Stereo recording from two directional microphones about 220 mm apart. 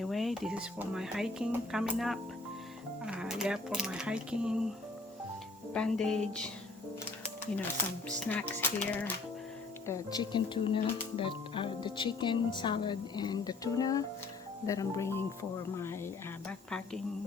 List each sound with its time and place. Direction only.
0.0 s speech: centre (ahead or behind)
5.7 s speech: 5° left (ahead or behind)
7.5 s speech: 5° left (ahead or behind)